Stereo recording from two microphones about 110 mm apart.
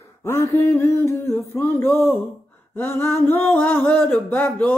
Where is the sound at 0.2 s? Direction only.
25° left (ahead or behind).